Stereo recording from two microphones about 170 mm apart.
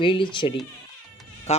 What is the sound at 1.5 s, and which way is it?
Speech, 40° left (ahead or behind).